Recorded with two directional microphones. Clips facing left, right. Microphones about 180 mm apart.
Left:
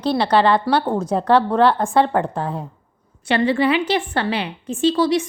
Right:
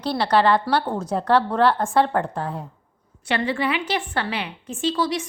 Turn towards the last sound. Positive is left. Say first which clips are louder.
# left 6 dB
turn(degrees=30)  # may be behind; listen again after turning